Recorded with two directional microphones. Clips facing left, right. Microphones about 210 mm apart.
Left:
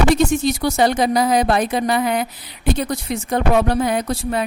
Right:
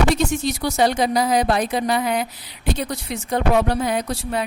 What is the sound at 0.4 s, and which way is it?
A woman's voice, 50° left (ahead or behind).